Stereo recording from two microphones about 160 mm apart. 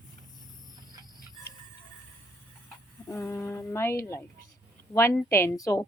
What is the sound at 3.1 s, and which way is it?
Speech, 15° left (ahead or behind).